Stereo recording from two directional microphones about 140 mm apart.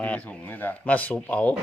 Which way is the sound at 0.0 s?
10° left (ahead or behind).